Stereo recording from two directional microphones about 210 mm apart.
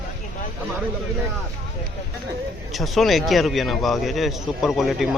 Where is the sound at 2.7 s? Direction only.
Centre (ahead or behind).